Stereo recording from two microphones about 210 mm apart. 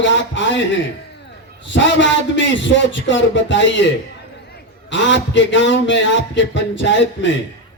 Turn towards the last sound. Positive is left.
turn(degrees=60)  # may be behind; listen again after turning